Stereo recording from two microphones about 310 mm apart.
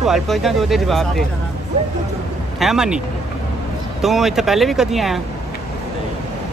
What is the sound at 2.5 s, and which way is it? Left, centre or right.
Speech, centre.